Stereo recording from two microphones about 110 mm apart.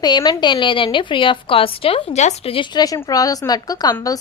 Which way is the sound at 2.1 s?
90° left.